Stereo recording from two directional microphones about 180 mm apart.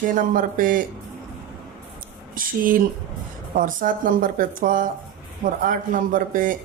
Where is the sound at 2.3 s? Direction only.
50° right (ahead or behind).